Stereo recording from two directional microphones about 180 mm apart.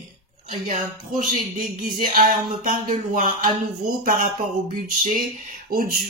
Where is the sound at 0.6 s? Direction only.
50° right (ahead or behind).